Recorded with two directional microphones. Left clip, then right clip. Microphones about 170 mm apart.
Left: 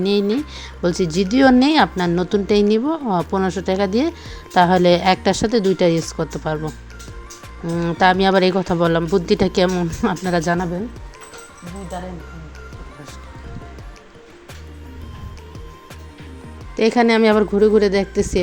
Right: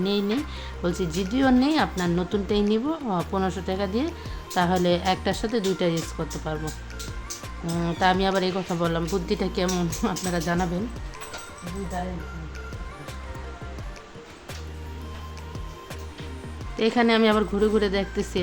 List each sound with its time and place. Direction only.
0.0 s speech: 40° left (ahead or behind)
7.7 s speech: 25° left (ahead or behind)
7.9 s speech: 40° left (ahead or behind)
9.6 s speech: 30° left (ahead or behind)
16.7 s speech: 30° left (ahead or behind)